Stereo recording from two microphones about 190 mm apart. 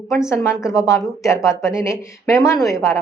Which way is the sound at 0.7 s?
15° left (ahead or behind).